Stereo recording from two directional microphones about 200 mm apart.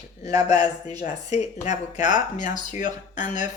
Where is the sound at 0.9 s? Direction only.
35° left (ahead or behind).